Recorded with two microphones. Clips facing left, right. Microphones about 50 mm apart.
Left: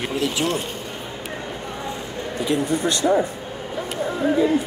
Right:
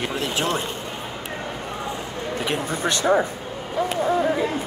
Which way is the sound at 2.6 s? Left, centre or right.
Right.